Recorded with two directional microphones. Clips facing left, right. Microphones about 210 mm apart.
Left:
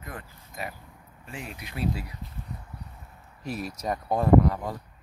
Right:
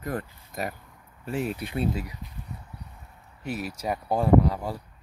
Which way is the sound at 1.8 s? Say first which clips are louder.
Right 1 dB; 20° right (ahead or behind).